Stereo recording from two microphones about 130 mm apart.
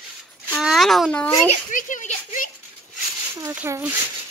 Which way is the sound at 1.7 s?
75° left (ahead or behind).